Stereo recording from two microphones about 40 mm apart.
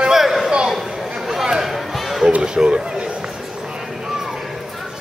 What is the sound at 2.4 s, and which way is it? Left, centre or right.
Speech, centre.